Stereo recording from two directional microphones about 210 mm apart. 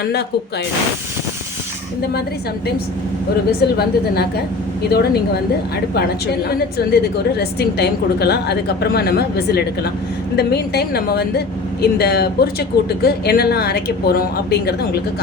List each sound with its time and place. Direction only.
0.0 s speech: 50° left (ahead or behind)
3.8 s speech: 50° left (ahead or behind)
6.5 s speech: 50° left (ahead or behind)